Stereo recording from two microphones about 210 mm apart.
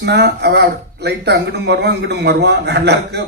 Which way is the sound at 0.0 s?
50° right (ahead or behind).